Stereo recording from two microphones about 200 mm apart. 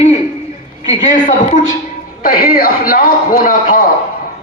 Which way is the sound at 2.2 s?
45° left (ahead or behind).